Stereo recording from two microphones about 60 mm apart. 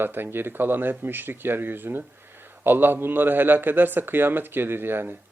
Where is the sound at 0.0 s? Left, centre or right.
Right.